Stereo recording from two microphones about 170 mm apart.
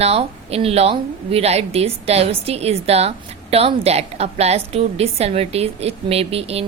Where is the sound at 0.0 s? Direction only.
35° right (ahead or behind).